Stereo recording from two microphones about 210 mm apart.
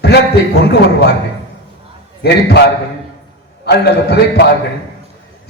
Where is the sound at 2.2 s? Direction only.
55° left (ahead or behind).